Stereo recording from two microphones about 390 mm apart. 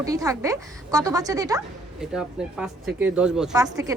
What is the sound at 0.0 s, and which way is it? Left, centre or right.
A woman's voice, centre.